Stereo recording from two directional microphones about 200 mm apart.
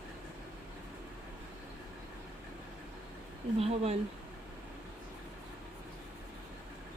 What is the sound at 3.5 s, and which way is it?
Speech, 30° right (ahead or behind).